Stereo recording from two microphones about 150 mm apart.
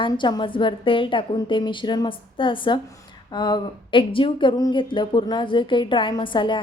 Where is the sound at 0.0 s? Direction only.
30° left (ahead or behind).